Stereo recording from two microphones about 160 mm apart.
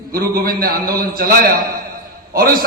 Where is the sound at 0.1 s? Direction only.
70° right (ahead or behind).